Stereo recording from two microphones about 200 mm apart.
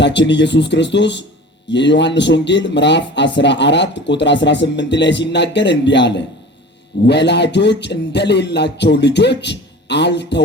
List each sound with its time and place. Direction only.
0.0 s a man's voice: 60° left (ahead or behind)